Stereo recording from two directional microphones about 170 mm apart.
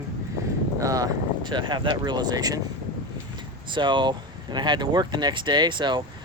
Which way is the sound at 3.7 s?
25° right (ahead or behind).